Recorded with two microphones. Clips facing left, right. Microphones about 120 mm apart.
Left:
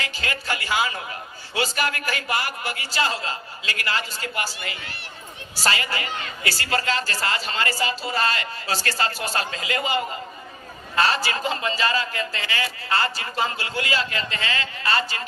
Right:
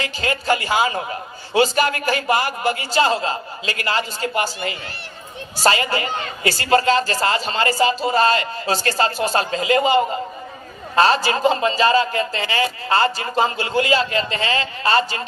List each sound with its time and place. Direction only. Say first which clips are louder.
0.0 s a man's voice: right 7 dB; 30° right (ahead or behind)